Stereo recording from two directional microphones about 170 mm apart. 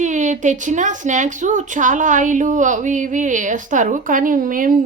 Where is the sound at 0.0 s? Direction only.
45° right (ahead or behind).